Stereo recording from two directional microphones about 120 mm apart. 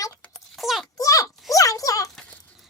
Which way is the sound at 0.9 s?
30° left (ahead or behind).